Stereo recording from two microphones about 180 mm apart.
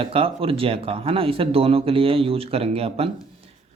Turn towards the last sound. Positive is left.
turn(degrees=-35)  # may be behind; listen again after turning